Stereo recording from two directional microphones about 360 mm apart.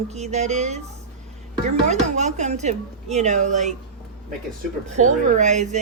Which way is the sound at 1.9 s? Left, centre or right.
Centre.